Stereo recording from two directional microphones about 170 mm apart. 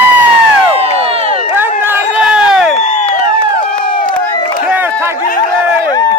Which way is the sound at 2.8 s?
45° left (ahead or behind).